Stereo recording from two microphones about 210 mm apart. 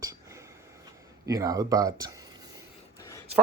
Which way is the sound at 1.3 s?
15° right (ahead or behind).